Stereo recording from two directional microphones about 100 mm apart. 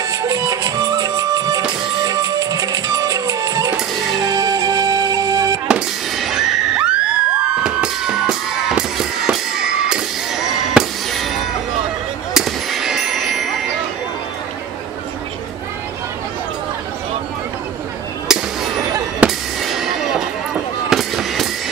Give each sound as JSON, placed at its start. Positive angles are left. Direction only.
{"t": 0.0, "sound": "music", "side_deg": -35}
{"t": 5.7, "sound": "bang", "side_deg": -5}
{"t": 12.4, "sound": "a sound", "side_deg": -5}
{"t": 19.1, "sound": "fireworks", "side_deg": -5}
{"t": 20.9, "sound": "fireworks", "side_deg": 0}